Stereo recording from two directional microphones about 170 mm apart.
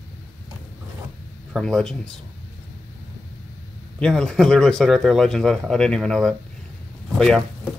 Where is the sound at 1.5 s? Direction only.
5° left (ahead or behind).